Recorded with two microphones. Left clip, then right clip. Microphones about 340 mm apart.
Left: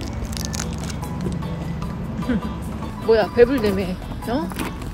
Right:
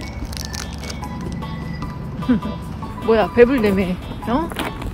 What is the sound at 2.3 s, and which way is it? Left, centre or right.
Speech, right.